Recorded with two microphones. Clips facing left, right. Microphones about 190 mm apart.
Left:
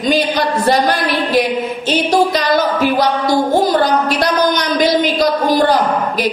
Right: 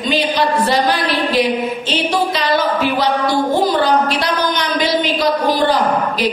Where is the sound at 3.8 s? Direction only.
45° left (ahead or behind).